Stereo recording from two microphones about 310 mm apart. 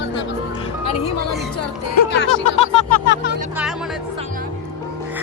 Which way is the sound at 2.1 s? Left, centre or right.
Left.